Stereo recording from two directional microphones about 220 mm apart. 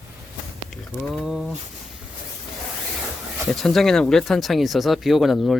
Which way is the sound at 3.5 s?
Centre (ahead or behind).